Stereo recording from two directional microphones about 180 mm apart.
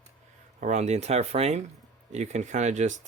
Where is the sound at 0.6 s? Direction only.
40° right (ahead or behind).